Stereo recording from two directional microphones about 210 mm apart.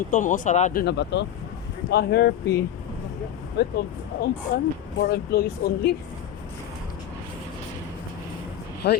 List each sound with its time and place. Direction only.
0.1 s speech: 40° left (ahead or behind)
8.8 s speech: 55° left (ahead or behind)